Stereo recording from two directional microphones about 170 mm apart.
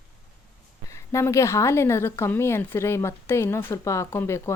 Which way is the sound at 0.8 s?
15° left (ahead or behind).